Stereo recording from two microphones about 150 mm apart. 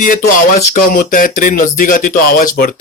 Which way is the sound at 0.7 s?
65° left (ahead or behind).